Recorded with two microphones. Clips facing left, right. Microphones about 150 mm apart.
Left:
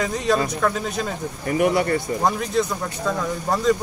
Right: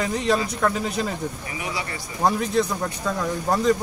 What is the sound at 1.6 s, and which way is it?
Speech, 55° left (ahead or behind).